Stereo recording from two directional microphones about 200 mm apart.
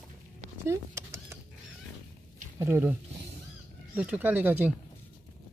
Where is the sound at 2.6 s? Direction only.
10° right (ahead or behind).